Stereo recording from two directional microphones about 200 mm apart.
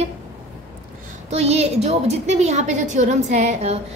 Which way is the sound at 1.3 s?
30° right (ahead or behind).